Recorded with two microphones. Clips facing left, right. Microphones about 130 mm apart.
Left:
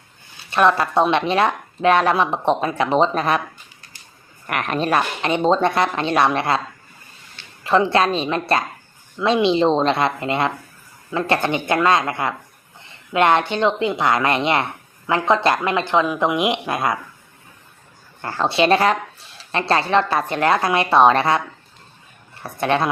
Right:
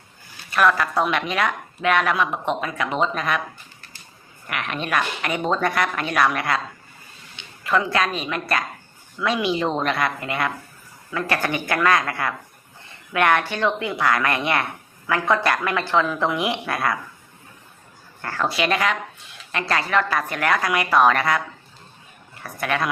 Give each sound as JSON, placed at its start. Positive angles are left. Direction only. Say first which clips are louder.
{"t": 0.5, "sound": "a woman's voice", "louder": "left 3 dB", "side_deg": 25}
{"t": 4.4, "sound": "a woman's voice", "louder": "left 6 dB", "side_deg": 45}
{"t": 7.6, "sound": "a woman's voice", "louder": "left 5 dB", "side_deg": 30}
{"t": 18.2, "sound": "a woman's voice", "louder": "left 5 dB", "side_deg": 25}
{"t": 22.4, "sound": "a woman's voice", "louder": "left 5 dB", "side_deg": 25}